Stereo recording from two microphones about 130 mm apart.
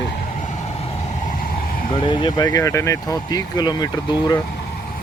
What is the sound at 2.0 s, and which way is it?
Speech, 30° left (ahead or behind).